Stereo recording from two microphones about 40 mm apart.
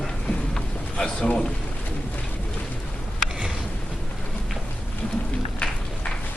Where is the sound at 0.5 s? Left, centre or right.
Centre.